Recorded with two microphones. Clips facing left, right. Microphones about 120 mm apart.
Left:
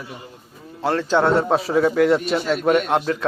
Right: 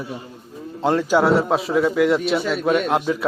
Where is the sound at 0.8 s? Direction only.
15° right (ahead or behind).